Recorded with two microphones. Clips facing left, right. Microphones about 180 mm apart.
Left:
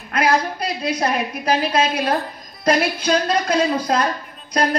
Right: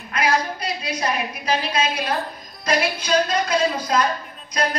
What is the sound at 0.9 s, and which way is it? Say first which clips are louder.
A woman's voice: left 3 dB; 55° left (ahead or behind).